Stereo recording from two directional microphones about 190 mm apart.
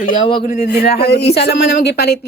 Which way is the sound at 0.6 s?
60° left (ahead or behind).